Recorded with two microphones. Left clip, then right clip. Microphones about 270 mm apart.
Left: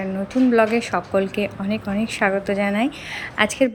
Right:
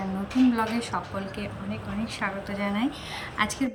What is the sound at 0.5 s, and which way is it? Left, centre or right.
A woman's voice, centre.